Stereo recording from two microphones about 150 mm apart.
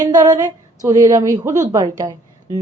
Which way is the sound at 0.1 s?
25° right (ahead or behind).